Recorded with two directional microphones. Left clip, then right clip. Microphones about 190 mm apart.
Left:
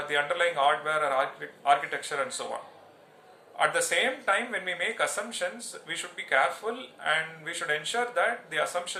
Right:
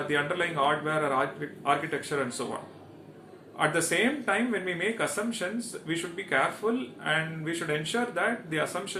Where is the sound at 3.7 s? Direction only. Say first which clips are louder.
Even; 20° left (ahead or behind).